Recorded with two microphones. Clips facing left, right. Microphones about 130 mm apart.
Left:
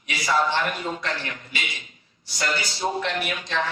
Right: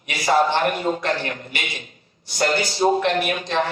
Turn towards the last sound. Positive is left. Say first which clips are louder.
# right 7 dB
turn(degrees=-55)  # may be behind; listen again after turning